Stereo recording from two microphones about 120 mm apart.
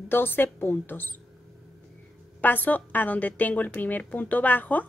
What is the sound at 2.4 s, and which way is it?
A woman's voice, 15° left (ahead or behind).